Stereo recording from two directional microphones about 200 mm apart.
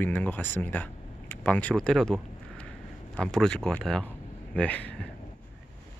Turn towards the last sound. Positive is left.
turn(degrees=5)  # may be behind; listen again after turning